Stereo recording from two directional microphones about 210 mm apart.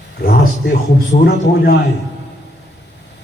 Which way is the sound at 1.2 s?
45° left (ahead or behind).